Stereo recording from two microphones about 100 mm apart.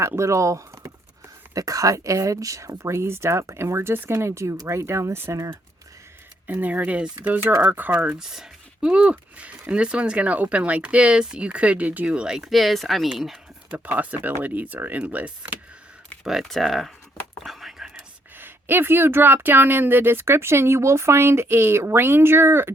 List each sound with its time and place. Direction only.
0.2 s speech: 30° right (ahead or behind)
6.5 s speech: 15° right (ahead or behind)
13.7 s speech: 15° right (ahead or behind)
16.2 s speech: centre (ahead or behind)
17.3 s whispering: centre (ahead or behind)
18.3 s speech: 20° right (ahead or behind)